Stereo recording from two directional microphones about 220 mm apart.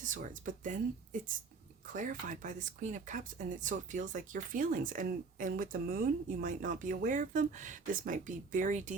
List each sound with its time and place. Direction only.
0.0 s speech: 35° right (ahead or behind)